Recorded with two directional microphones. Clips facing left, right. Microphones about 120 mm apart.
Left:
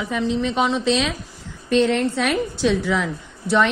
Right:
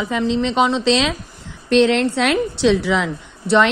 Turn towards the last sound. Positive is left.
turn(degrees=-75)  # may be behind; listen again after turning